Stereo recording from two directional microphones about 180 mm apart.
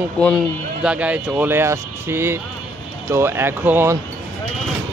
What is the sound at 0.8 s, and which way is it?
Speech, 5° right (ahead or behind).